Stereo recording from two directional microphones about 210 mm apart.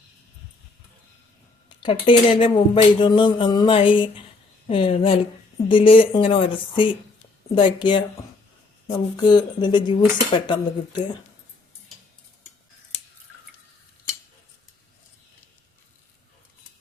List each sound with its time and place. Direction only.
1.8 s speech: 25° left (ahead or behind)